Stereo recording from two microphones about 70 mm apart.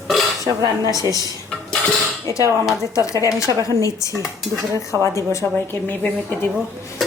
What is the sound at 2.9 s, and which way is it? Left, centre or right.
Speech, left.